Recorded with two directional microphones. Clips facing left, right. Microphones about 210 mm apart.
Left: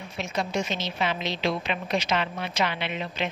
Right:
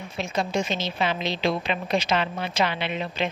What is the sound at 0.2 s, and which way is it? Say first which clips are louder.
Speech: right 2 dB; 30° right (ahead or behind).